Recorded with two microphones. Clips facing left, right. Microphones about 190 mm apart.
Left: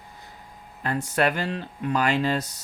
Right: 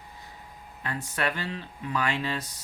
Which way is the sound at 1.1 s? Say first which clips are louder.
Left 7 dB; 40° left (ahead or behind).